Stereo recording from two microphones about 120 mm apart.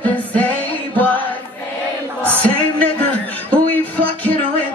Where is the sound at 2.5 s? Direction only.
15° left (ahead or behind).